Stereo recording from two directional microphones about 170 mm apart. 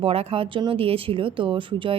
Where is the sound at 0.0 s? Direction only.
35° right (ahead or behind).